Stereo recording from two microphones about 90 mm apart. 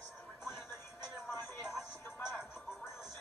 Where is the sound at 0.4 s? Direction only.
Centre (ahead or behind).